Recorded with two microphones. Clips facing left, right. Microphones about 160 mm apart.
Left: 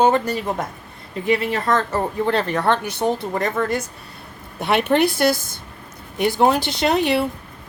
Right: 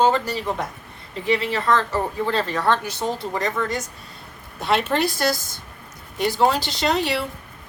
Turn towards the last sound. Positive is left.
turn(degrees=55)  # may be behind; listen again after turning